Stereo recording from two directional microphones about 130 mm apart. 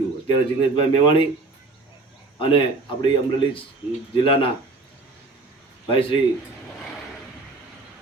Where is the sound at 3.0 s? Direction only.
40° left (ahead or behind).